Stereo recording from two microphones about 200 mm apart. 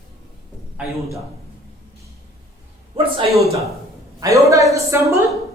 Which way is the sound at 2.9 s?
25° right (ahead or behind).